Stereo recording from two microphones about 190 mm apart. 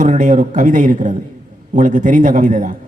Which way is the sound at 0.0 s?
40° right (ahead or behind).